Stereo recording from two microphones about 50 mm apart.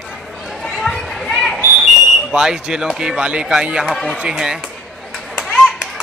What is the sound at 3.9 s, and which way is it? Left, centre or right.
Speech, centre.